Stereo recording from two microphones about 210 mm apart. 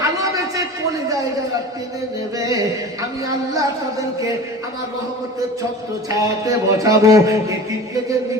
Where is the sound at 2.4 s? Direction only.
15° right (ahead or behind).